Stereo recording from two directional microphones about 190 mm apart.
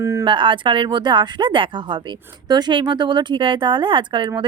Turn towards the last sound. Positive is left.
turn(degrees=-25)  # may be behind; listen again after turning